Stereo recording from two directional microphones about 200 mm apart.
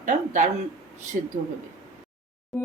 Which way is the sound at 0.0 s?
40° right (ahead or behind).